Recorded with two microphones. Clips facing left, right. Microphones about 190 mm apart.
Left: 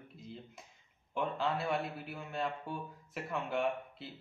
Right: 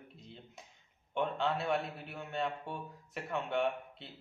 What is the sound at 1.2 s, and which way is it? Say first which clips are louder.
A man's voice: right 1 dB; centre (ahead or behind).